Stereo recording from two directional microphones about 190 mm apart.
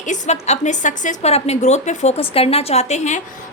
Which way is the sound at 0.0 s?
40° left (ahead or behind).